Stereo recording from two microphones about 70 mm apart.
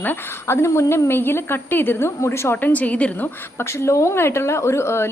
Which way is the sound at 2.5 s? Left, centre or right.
Left.